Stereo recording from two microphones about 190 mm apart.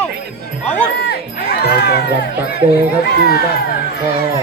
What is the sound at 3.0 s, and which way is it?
Speech, 55° left (ahead or behind).